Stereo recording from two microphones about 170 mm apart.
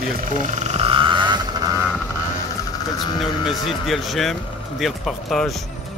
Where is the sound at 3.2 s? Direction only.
Centre (ahead or behind).